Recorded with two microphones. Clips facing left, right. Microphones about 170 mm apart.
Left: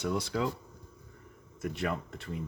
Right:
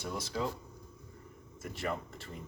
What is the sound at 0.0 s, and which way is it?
Speech, 70° left (ahead or behind).